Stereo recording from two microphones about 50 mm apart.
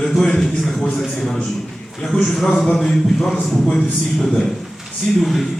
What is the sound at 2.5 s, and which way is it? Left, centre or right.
Speech, centre.